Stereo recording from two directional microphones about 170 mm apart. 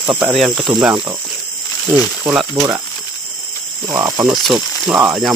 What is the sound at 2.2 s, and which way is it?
Speech, 10° right (ahead or behind).